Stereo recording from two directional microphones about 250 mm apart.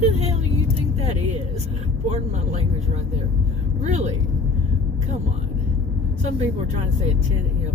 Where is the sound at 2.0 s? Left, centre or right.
Right.